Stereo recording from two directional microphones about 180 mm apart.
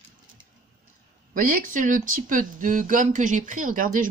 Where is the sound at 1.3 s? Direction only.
50° right (ahead or behind).